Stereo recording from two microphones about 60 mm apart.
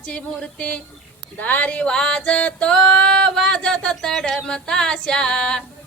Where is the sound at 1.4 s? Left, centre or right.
Left.